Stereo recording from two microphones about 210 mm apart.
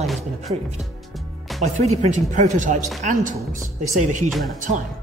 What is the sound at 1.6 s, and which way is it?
Speech, 35° right (ahead or behind).